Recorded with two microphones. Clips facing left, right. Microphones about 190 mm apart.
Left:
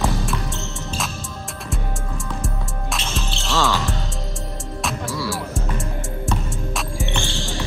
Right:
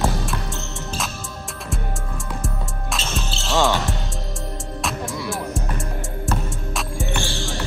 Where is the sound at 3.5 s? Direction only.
20° right (ahead or behind).